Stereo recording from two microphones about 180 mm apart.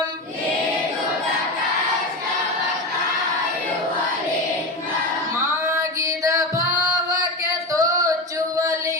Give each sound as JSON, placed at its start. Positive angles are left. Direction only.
{"t": 6.0, "sound": "music", "side_deg": -15}
{"t": 7.7, "sound": "female singing", "side_deg": -20}